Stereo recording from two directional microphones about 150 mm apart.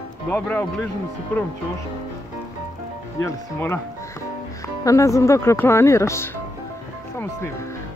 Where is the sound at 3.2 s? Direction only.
15° left (ahead or behind).